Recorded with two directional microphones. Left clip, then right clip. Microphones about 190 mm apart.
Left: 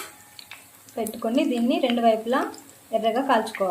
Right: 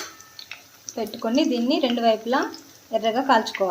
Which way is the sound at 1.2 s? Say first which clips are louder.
Right 2 dB; 5° right (ahead or behind).